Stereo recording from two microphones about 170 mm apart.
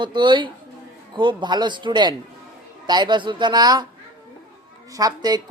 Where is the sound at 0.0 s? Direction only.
25° right (ahead or behind).